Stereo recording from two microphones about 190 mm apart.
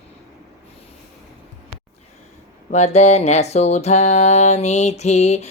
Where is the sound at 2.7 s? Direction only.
35° left (ahead or behind).